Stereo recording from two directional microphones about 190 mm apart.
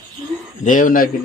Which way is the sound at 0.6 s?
45° left (ahead or behind).